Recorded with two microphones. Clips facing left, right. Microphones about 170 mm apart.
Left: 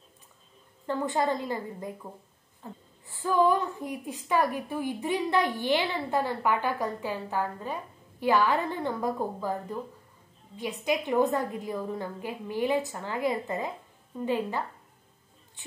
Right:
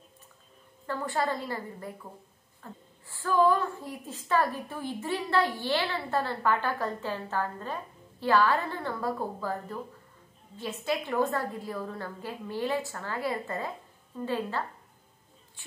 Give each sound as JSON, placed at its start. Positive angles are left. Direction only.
{"t": 0.8, "sound": "a woman's voice", "side_deg": 20}